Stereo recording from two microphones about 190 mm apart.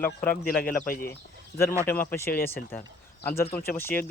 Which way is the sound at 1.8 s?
10° left (ahead or behind).